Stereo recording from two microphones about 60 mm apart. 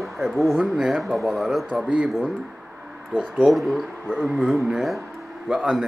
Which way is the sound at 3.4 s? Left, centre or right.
Centre.